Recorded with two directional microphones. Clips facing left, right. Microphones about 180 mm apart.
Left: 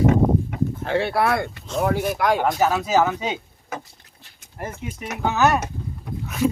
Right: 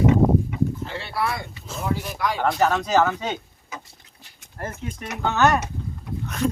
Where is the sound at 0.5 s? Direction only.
55° left (ahead or behind).